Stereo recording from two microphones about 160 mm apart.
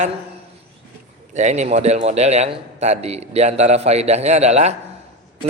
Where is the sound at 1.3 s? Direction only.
45° right (ahead or behind).